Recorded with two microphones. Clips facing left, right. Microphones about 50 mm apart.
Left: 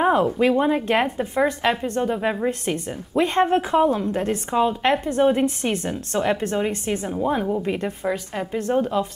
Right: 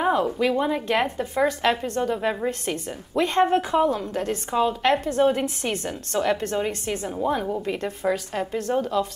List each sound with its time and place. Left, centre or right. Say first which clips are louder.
0.0 s a woman's voice: left 3 dB; left
4.9 s a woman's voice: left 2 dB; centre
5.9 s a woman's voice: right 1 dB; left